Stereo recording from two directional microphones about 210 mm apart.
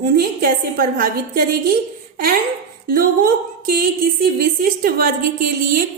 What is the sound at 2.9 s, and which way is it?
A woman's voice, 40° right (ahead or behind).